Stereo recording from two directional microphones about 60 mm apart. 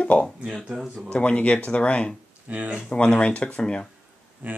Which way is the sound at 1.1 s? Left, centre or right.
Left.